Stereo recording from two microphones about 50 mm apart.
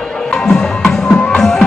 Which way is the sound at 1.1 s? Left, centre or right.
Left.